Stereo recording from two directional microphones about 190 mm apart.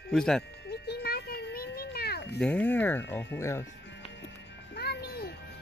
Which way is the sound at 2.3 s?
5° left (ahead or behind).